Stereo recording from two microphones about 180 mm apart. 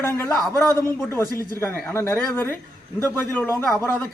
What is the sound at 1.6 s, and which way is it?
A man's voice, 10° left (ahead or behind).